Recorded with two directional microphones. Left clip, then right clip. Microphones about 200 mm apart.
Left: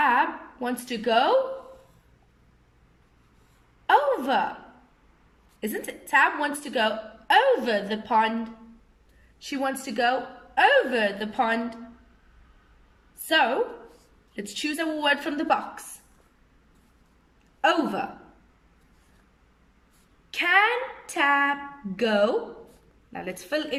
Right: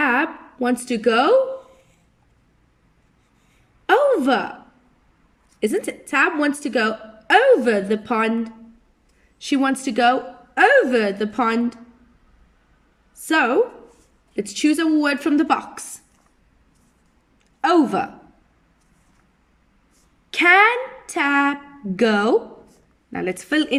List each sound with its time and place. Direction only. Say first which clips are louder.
0.0 s a sound: right 2 dB; 50° right (ahead or behind)
3.8 s a sound: right 5 dB; 55° right (ahead or behind)
5.5 s a woman's voice: right 10 dB; 50° right (ahead or behind)
9.4 s a woman's voice: right 8 dB; 55° right (ahead or behind)
13.2 s a woman's voice: right 5 dB; 50° right (ahead or behind)
17.6 s a woman's voice: right 6 dB; 50° right (ahead or behind)
20.3 s a woman's voice: right 7 dB; 50° right (ahead or behind)